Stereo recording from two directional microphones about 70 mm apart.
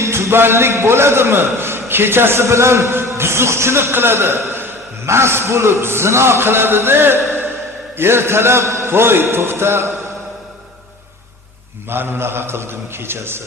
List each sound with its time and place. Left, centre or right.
0.0 s a man's voice: right
11.9 s a man's voice: right